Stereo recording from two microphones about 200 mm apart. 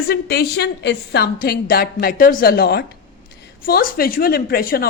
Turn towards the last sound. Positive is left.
turn(degrees=50)  # may be behind; listen again after turning